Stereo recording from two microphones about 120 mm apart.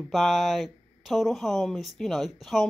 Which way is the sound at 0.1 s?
Centre (ahead or behind).